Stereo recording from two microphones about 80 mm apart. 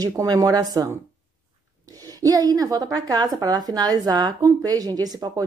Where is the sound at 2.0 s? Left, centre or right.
Right.